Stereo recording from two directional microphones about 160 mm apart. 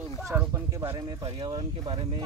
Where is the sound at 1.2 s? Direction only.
30° right (ahead or behind).